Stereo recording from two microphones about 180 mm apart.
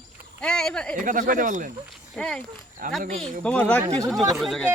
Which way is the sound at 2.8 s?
45° right (ahead or behind).